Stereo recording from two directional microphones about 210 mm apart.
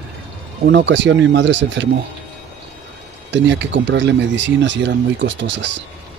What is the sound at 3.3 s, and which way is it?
Speech, 60° right (ahead or behind).